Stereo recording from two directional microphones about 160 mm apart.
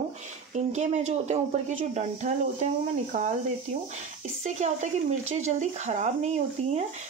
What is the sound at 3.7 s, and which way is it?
Speech, 40° right (ahead or behind).